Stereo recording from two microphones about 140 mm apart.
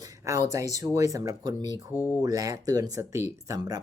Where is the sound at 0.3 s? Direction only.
25° right (ahead or behind).